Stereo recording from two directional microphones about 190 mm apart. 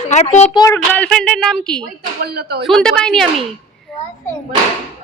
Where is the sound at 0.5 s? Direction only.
20° left (ahead or behind).